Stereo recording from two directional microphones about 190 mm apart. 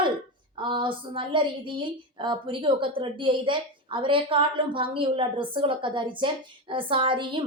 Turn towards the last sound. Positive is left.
turn(degrees=-25)  # may be behind; listen again after turning